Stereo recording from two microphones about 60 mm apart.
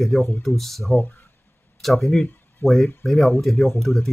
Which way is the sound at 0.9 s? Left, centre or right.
Left.